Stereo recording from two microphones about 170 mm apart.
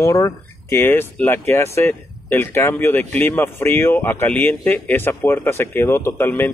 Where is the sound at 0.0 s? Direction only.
20° left (ahead or behind).